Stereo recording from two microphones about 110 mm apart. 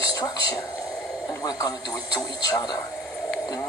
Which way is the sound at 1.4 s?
35° left (ahead or behind).